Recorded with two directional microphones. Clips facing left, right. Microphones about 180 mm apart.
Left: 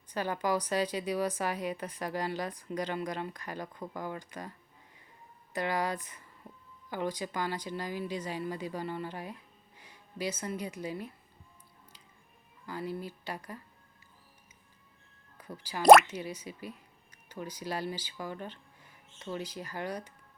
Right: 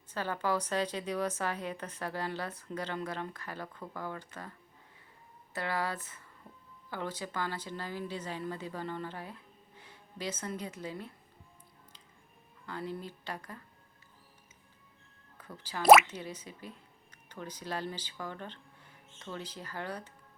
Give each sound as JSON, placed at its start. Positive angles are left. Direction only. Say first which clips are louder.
{"t": 0.1, "sound": "a woman's voice", "louder": "left 2 dB", "side_deg": 15}
{"t": 5.5, "sound": "a woman's voice", "louder": "left 3 dB", "side_deg": 15}
{"t": 12.6, "sound": "a woman's voice", "louder": "left 2 dB", "side_deg": 10}
{"t": 15.4, "sound": "speech", "louder": "left 2 dB", "side_deg": 10}
{"t": 15.8, "sound": "speech", "louder": "left 2 dB", "side_deg": -5}
{"t": 16.0, "sound": "a woman's voice", "louder": "left 3 dB", "side_deg": 10}